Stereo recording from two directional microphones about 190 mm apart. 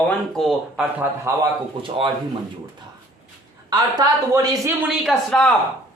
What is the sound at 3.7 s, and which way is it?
Speech, 20° right (ahead or behind).